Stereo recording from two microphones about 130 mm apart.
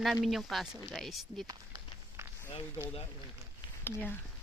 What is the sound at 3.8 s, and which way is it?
Speech, 15° left (ahead or behind).